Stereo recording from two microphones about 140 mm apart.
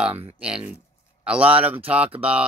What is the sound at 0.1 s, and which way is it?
Speech, 45° right (ahead or behind).